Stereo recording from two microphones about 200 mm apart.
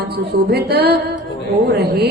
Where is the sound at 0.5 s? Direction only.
55° right (ahead or behind).